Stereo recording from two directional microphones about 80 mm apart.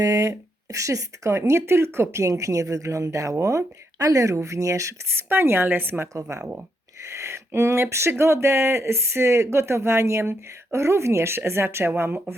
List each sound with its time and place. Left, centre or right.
0.0 s speech: right
5.3 s speech: right
7.1 s speech: right